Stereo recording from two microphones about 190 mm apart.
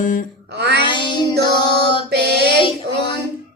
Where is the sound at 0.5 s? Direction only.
60° right (ahead or behind).